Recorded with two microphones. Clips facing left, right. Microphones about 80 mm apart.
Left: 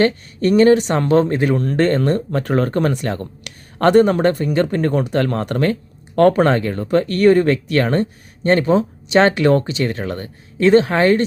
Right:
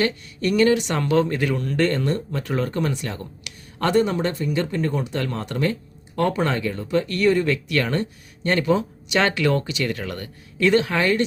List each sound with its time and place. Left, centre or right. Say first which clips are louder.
0.0 s speech: left 7 dB; left